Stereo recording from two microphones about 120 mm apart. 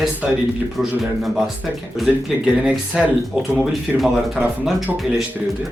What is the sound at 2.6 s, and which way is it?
Speech, 5° right (ahead or behind).